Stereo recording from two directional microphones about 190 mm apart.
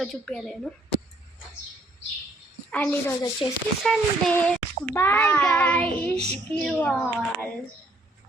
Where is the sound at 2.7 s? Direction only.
10° left (ahead or behind).